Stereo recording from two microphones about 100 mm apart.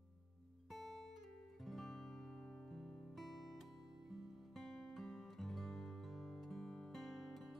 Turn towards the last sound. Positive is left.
turn(degrees=0)  # may be behind; listen again after turning